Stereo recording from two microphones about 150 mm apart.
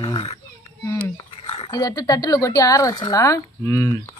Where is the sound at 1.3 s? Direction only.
40° left (ahead or behind).